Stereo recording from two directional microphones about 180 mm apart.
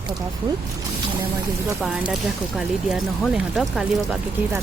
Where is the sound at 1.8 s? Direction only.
Centre (ahead or behind).